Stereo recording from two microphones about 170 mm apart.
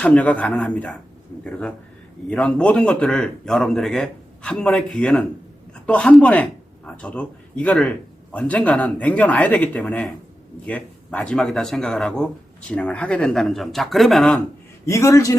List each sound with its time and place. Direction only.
0.0 s speech: 5° left (ahead or behind)
14.8 s a man's voice: 20° left (ahead or behind)